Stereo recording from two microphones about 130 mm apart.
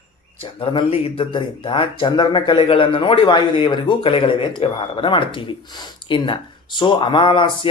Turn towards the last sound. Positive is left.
turn(degrees=40)  # may be behind; listen again after turning